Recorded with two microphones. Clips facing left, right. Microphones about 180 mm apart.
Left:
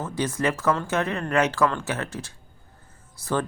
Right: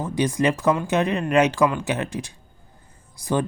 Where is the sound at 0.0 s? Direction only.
15° right (ahead or behind).